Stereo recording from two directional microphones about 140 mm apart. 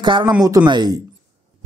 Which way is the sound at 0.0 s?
35° right (ahead or behind).